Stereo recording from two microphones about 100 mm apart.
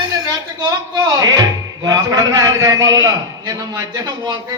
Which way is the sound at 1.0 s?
35° right (ahead or behind).